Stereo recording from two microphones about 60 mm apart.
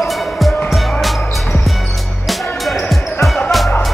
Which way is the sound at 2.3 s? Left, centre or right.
Centre.